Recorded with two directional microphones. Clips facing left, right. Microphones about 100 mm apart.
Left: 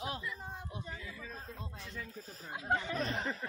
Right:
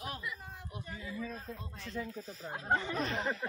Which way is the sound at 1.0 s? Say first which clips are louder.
Right 7 dB; 25° right (ahead or behind).